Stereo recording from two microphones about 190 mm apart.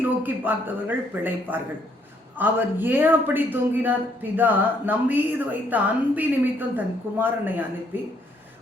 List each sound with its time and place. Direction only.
0.2 s a man's voice: 10° right (ahead or behind)